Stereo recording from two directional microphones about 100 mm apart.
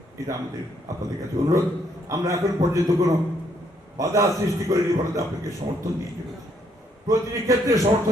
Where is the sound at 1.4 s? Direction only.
35° right (ahead or behind).